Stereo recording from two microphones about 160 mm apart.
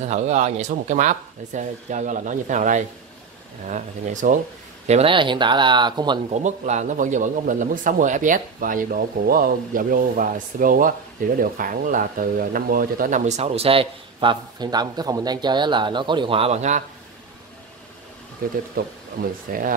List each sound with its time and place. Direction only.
0.0 s a man's voice: 45° right (ahead or behind)
4.8 s speech: 40° right (ahead or behind)
6.3 s a man's voice: 45° right (ahead or behind)
18.4 s speech: 65° right (ahead or behind)